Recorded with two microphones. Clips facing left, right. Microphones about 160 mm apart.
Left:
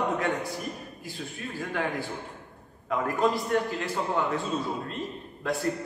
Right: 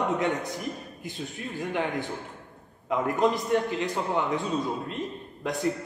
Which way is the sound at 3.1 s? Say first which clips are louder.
Right 1 dB; 20° right (ahead or behind).